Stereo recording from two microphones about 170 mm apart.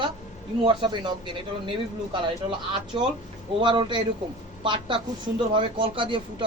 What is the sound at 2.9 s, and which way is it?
Speech, 30° right (ahead or behind).